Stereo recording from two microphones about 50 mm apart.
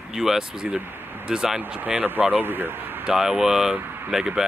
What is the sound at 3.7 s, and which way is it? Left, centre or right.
Speech, right.